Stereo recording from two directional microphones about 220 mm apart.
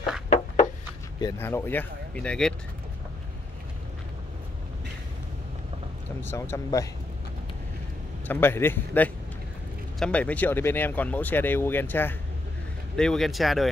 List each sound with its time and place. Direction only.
0.6 s a sound: 35° left (ahead or behind)
1.2 s speech: 10° left (ahead or behind)
6.2 s speech: 10° left (ahead or behind)
8.3 s speech: 10° left (ahead or behind)